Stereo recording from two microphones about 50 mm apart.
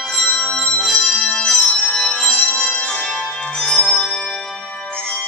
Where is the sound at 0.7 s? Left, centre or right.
Centre.